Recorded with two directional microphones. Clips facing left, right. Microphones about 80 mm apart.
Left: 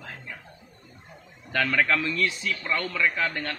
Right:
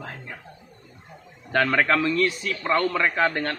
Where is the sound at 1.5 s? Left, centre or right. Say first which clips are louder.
Right 3 dB; right.